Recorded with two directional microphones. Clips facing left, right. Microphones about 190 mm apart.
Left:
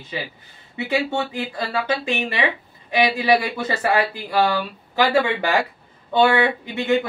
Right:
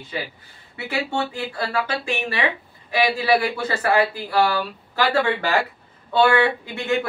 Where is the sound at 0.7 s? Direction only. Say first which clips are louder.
Left 3 dB; 20° left (ahead or behind).